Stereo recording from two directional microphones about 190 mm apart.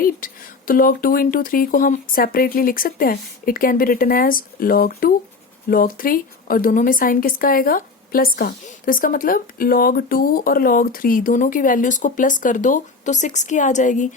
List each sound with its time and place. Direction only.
0.2 s a woman's voice: 45° left (ahead or behind)